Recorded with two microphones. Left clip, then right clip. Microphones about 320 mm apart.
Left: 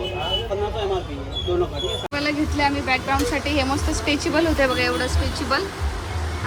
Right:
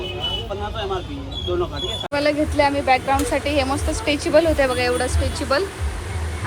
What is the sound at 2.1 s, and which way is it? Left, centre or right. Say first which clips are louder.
Speech: right 6 dB; centre.